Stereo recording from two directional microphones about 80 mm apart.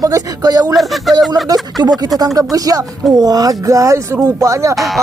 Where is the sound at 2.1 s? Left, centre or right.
Right.